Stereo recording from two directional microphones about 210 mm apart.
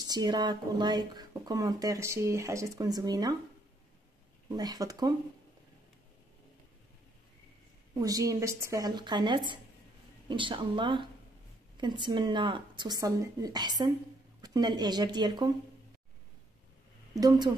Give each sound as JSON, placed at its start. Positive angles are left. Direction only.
{"t": 0.0, "sound": "speech", "side_deg": -20}
{"t": 4.5, "sound": "a woman's voice", "side_deg": -20}
{"t": 7.9, "sound": "a woman's voice", "side_deg": -15}
{"t": 17.1, "sound": "speech", "side_deg": -15}